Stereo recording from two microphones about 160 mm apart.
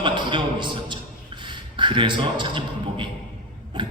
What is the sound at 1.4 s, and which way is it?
A man's voice, 30° right (ahead or behind).